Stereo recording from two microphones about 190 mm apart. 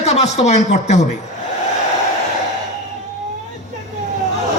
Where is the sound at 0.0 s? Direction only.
35° left (ahead or behind).